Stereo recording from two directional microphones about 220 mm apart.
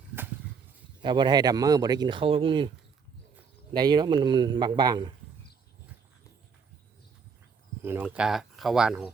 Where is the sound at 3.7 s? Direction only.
20° right (ahead or behind).